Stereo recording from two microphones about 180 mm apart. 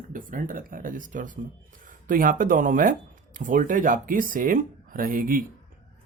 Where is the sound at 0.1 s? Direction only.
50° right (ahead or behind).